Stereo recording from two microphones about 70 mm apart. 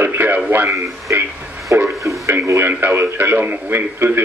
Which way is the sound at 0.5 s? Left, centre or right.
Right.